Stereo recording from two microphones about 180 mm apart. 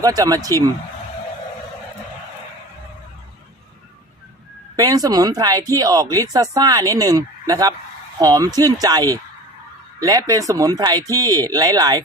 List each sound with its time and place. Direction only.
0.0 s speech: 20° right (ahead or behind)
4.8 s speech: 20° right (ahead or behind)